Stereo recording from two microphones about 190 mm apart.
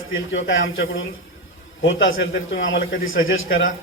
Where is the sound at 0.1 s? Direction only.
80° left.